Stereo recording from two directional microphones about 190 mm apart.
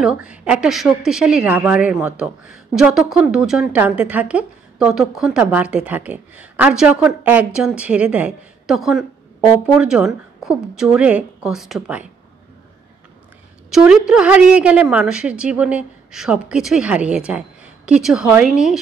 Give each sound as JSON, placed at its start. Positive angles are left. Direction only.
{"t": 0.0, "sound": "a woman's voice", "side_deg": -5}
{"t": 13.7, "sound": "a woman's voice", "side_deg": 0}